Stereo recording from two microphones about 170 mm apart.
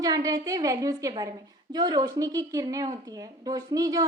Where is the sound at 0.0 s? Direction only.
20° right (ahead or behind).